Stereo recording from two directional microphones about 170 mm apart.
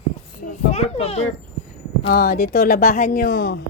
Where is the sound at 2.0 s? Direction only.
65° left (ahead or behind).